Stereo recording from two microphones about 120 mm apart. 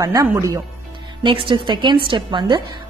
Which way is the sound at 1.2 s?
45° right (ahead or behind).